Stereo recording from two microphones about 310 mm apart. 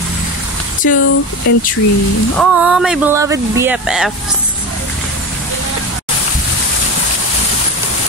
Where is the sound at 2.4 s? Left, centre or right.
Centre.